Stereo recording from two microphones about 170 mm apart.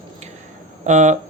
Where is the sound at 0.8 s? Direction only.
45° right (ahead or behind).